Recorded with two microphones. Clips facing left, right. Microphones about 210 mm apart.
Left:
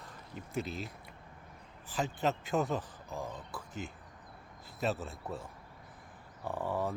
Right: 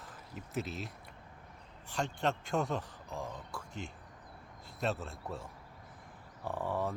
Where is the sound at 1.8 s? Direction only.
5° left (ahead or behind).